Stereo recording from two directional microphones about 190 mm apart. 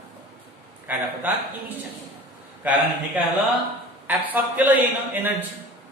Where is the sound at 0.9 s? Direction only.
10° right (ahead or behind).